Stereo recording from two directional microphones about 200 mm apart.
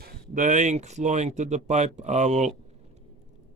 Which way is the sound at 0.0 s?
40° right (ahead or behind).